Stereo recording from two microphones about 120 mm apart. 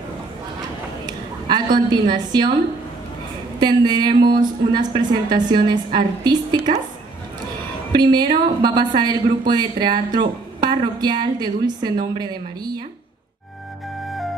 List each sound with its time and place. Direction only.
1.0 s a woman's voice: 35° right (ahead or behind)
3.5 s speech: 35° right (ahead or behind)
7.9 s speech: 35° right (ahead or behind)
14.0 s music: centre (ahead or behind)